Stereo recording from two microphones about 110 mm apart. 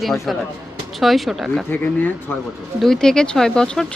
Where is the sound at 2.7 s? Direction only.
5° left (ahead or behind).